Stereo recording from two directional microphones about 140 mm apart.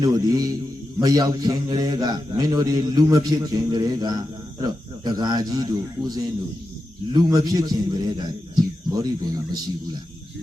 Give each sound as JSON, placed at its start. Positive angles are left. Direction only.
{"t": 0.0, "sound": "a man's voice", "side_deg": -25}